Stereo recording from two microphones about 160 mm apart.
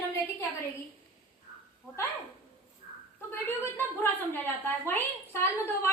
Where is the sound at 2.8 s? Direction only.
55° left (ahead or behind).